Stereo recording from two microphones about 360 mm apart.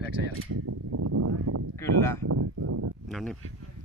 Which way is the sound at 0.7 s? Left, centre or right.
Right.